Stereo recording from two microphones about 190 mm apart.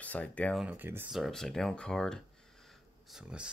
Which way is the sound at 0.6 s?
10° right (ahead or behind).